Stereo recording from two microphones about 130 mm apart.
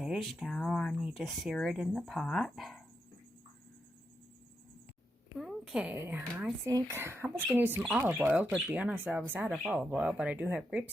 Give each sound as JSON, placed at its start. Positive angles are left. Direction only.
{"t": 0.0, "sound": "speech", "side_deg": 0}
{"t": 5.4, "sound": "a woman's voice", "side_deg": 0}